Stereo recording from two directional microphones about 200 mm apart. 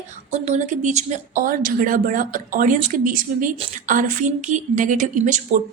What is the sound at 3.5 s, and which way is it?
Speech, 30° right (ahead or behind).